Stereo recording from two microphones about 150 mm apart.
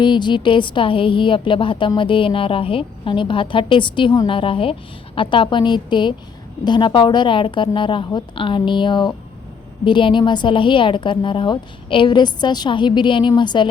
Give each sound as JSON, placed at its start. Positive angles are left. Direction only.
{"t": 0.0, "sound": "a woman's voice", "side_deg": 30}